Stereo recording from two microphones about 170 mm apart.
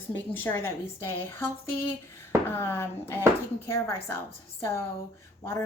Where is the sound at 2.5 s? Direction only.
15° left (ahead or behind).